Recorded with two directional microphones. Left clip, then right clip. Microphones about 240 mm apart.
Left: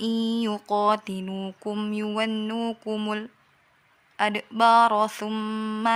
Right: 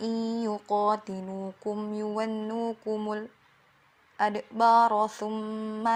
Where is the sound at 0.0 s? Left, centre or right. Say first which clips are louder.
Left 4 dB; left.